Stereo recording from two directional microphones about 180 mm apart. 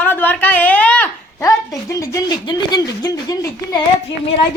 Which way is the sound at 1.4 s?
20° left (ahead or behind).